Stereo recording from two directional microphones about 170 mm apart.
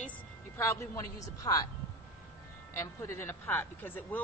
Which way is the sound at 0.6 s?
15° left (ahead or behind).